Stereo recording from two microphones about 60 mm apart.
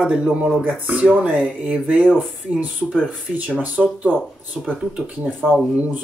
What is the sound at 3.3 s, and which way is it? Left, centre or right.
Speech, right.